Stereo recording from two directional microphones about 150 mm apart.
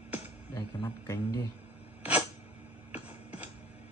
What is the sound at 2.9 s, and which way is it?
Music, 10° right (ahead or behind).